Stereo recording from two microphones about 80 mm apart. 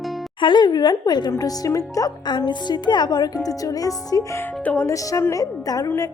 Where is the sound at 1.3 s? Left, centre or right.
Left.